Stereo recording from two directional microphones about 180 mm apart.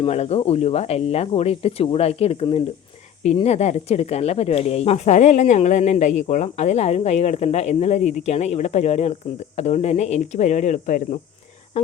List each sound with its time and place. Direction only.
0.0 s speech: 35° left (ahead or behind)